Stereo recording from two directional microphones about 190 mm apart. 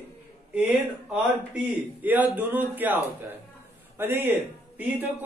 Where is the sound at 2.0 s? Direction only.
10° right (ahead or behind).